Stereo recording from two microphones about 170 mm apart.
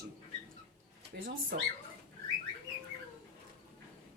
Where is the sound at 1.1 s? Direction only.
80° right.